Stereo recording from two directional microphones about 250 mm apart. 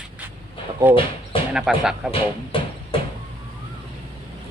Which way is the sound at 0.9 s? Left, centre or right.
Centre.